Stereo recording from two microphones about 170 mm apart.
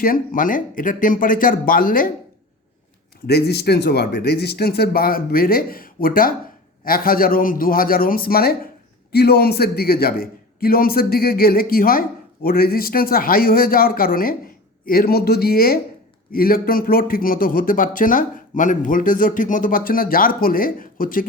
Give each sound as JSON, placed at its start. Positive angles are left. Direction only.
{"t": 0.0, "sound": "speech", "side_deg": 55}
{"t": 3.2, "sound": "a man's voice", "side_deg": 70}